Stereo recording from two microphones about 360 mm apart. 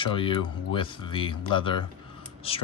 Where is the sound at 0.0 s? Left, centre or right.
Centre.